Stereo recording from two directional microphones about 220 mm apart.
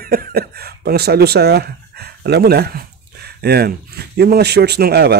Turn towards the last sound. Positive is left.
turn(degrees=-45)  # may be behind; listen again after turning